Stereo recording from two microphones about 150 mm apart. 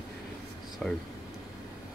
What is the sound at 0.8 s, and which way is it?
Speech, 5° left (ahead or behind).